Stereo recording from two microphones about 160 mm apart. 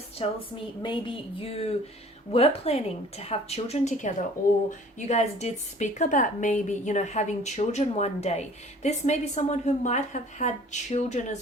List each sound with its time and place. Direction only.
0.2 s a woman's voice: 40° left (ahead or behind)